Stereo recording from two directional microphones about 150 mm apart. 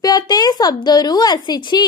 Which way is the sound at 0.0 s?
25° left (ahead or behind).